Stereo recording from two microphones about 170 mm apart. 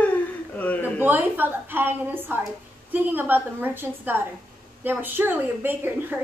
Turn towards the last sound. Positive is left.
turn(degrees=-10)  # may be behind; listen again after turning